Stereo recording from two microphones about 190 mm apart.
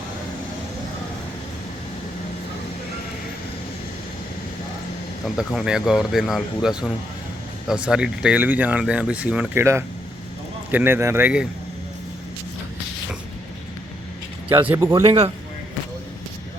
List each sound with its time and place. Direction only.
5.2 s speech: centre (ahead or behind)
14.8 s speech: 15° right (ahead or behind)
15.0 s speech: 30° right (ahead or behind)